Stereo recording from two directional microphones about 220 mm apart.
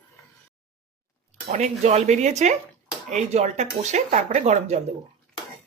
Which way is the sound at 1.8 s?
30° right (ahead or behind).